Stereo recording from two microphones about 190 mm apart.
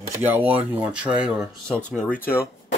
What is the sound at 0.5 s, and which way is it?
Speech, 5° right (ahead or behind).